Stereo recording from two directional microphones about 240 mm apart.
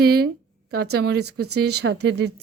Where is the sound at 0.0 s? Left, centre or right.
Right.